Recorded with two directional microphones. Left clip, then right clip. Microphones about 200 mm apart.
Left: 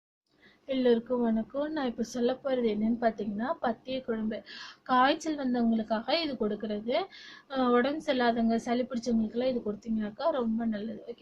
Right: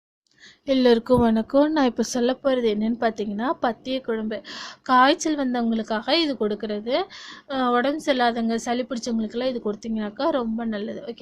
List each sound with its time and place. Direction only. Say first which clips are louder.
0.7 s a woman's voice: right 9 dB; 45° right (ahead or behind)